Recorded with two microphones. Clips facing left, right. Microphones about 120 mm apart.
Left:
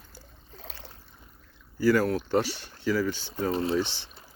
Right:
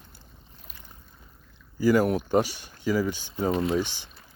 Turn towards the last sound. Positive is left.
turn(degrees=-15)  # may be behind; listen again after turning